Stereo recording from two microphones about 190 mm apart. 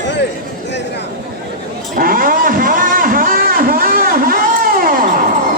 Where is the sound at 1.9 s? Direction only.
50° right (ahead or behind).